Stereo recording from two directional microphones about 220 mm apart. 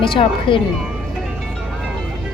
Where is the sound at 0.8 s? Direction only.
Centre (ahead or behind).